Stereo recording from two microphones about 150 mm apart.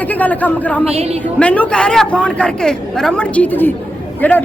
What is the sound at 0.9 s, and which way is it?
Speech, 45° right (ahead or behind).